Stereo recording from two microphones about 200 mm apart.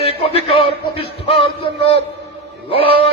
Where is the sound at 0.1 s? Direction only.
30° left (ahead or behind).